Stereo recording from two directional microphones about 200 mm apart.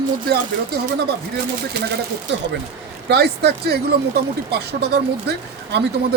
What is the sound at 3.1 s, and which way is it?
Speech, 55° right (ahead or behind).